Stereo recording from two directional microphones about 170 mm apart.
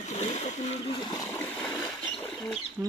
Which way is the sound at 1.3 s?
10° left (ahead or behind).